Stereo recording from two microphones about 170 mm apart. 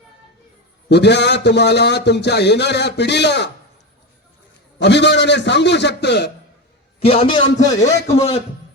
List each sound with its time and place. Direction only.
0.9 s a man's voice: 80° left
4.8 s a man's voice: 90° left
7.0 s a man's voice: 35° left (ahead or behind)